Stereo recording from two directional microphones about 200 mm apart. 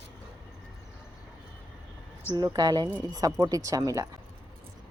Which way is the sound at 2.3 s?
20° right (ahead or behind).